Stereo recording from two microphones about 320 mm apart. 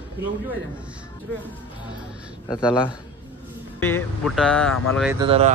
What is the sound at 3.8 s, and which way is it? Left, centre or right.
Speech, centre.